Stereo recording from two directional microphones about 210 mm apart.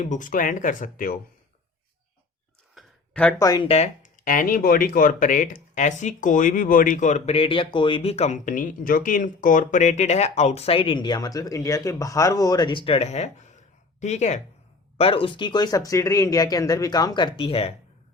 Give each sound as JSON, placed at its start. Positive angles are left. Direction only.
{"t": 0.0, "sound": "speech", "side_deg": 35}
{"t": 2.7, "sound": "speech", "side_deg": 5}